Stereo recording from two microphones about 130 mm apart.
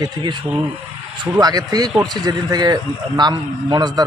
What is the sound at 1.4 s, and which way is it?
A man's voice, 30° right (ahead or behind).